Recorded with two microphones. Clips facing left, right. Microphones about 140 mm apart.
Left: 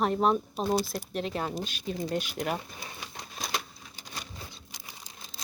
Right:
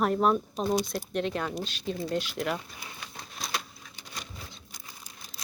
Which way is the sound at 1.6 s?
10° left (ahead or behind).